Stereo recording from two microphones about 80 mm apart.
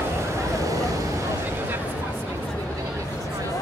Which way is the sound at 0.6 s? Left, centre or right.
Right.